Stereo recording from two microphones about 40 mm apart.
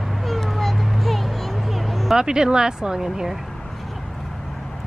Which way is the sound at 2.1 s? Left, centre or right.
Centre.